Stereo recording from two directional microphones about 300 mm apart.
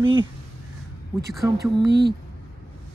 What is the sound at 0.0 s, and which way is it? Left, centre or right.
Speech, centre.